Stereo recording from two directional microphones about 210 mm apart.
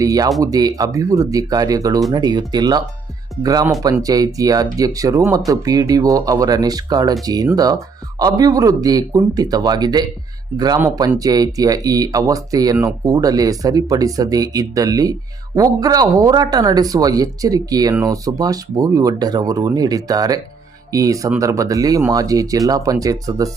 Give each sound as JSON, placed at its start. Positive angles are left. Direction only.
{"t": 0.0, "sound": "speech", "side_deg": -15}